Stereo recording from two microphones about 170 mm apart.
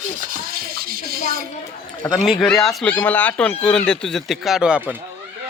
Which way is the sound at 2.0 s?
10° left (ahead or behind).